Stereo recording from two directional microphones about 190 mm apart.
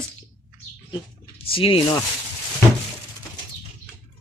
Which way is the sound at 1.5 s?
30° left (ahead or behind).